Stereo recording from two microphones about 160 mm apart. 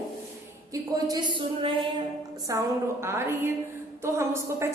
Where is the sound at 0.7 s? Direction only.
25° right (ahead or behind).